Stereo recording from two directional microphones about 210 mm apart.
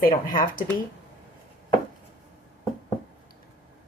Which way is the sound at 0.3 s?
40° left (ahead or behind).